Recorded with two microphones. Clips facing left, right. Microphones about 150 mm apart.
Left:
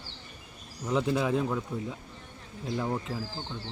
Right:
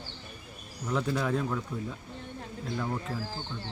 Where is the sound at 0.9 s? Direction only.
20° left (ahead or behind).